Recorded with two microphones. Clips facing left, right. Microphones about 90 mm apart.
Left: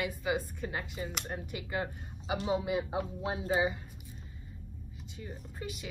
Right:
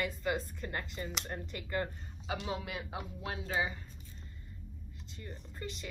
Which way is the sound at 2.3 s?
30° left (ahead or behind).